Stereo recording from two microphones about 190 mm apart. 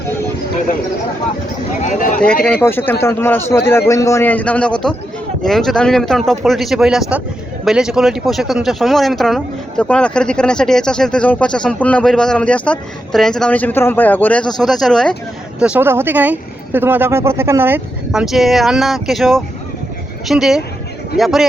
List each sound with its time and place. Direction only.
1.8 s speech: 40° left (ahead or behind)
2.2 s a man's voice: 5° left (ahead or behind)